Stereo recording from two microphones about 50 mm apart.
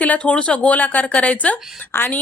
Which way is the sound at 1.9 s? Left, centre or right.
Left.